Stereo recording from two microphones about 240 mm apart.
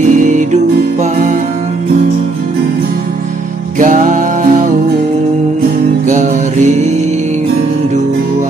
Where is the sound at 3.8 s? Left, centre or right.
Right.